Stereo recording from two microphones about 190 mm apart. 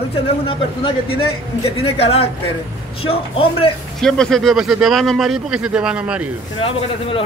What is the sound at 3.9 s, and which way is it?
Speech, 5° left (ahead or behind).